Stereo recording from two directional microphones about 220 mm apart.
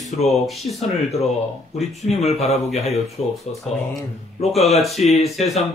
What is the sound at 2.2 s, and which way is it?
Speech, 30° left (ahead or behind).